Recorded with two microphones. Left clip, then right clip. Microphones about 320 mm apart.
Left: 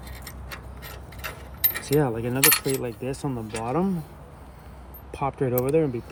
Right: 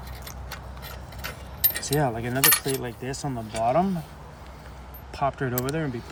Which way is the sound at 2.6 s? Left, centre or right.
Centre.